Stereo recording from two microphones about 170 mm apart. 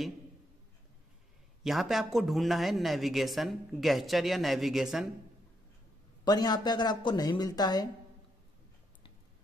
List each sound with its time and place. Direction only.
1.6 s speech: centre (ahead or behind)
6.2 s speech: 25° left (ahead or behind)